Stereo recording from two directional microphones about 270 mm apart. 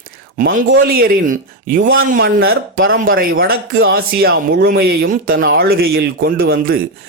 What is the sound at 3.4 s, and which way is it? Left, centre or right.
Speech, right.